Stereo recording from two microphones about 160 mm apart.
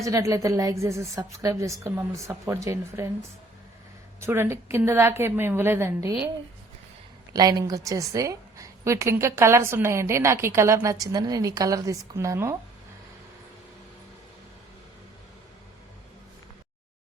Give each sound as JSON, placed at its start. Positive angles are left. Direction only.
{"t": 0.0, "sound": "a woman's voice", "side_deg": -20}
{"t": 4.2, "sound": "a woman's voice", "side_deg": -15}
{"t": 7.3, "sound": "a woman's voice", "side_deg": -25}